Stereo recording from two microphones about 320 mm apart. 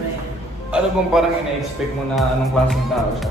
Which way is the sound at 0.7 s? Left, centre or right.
Centre.